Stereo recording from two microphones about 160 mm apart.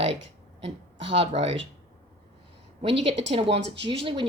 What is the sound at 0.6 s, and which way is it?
Speech, 40° right (ahead or behind).